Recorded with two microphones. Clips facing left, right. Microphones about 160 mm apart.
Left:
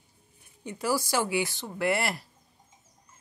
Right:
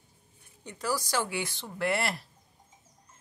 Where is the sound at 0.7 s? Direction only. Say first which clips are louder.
Left 4 dB; 10° left (ahead or behind).